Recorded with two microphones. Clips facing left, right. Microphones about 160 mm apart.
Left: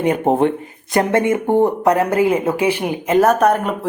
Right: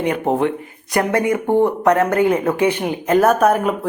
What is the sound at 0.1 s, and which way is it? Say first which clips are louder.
Speech: left 4 dB; 25° left (ahead or behind).